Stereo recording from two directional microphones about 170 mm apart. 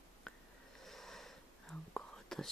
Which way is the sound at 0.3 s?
Centre (ahead or behind).